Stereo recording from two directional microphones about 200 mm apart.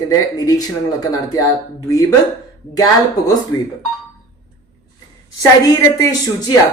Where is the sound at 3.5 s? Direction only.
90° left.